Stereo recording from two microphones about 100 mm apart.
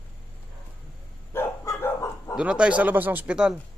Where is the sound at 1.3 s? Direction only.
25° left (ahead or behind).